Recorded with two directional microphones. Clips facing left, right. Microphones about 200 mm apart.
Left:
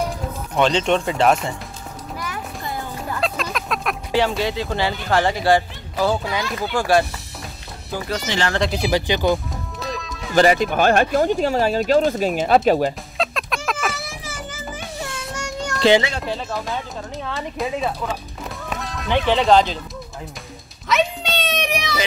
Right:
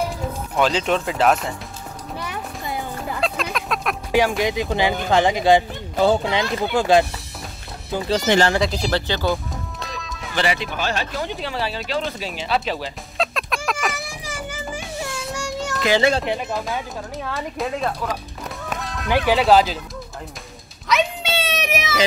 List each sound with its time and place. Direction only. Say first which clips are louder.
0.6 s speech: left 2 dB; 5° right (ahead or behind)
2.1 s music: even; 15° right (ahead or behind)
3.2 s a sound: even; centre (ahead or behind)
4.4 s speech: right 2 dB; 15° right (ahead or behind)
8.5 s speech: even; centre (ahead or behind)
8.8 s speech: left 3 dB; 15° left (ahead or behind)
9.8 s music: left 4 dB; centre (ahead or behind)
10.3 s speech: left 8 dB; 45° left (ahead or behind)
13.2 s a sound: even; centre (ahead or behind)
13.9 s children playing: right 1 dB; 15° right (ahead or behind)
15.3 s music: even; 5° right (ahead or behind)
16.3 s speech: right 2 dB; 15° right (ahead or behind)
16.5 s speech: right 1 dB; centre (ahead or behind)
20.9 s meow: even; 5° right (ahead or behind)